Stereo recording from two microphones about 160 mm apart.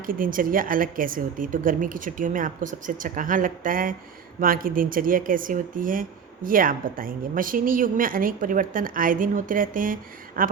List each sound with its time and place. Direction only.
0.0 s speech: 60° right (ahead or behind)